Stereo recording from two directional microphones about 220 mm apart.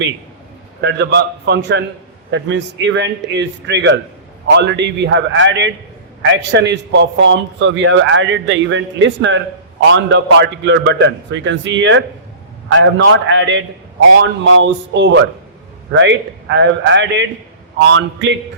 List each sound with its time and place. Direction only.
0.8 s a man's voice: 50° right (ahead or behind)